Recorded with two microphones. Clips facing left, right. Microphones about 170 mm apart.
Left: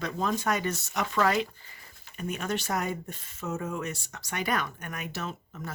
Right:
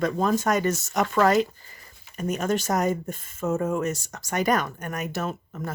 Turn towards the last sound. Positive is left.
turn(degrees=-50)  # may be behind; listen again after turning